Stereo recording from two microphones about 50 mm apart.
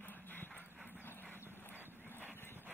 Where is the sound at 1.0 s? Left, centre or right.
Left.